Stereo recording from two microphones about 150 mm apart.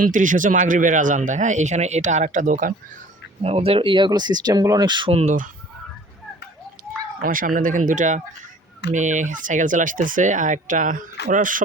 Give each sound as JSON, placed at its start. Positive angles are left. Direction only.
{"t": 0.0, "sound": "speech", "side_deg": -60}
{"t": 3.4, "sound": "speech", "side_deg": -40}
{"t": 5.2, "sound": "speech", "side_deg": -55}
{"t": 7.2, "sound": "speech", "side_deg": -65}